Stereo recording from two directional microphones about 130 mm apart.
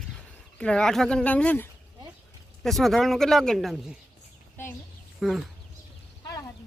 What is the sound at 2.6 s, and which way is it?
Speech, centre (ahead or behind).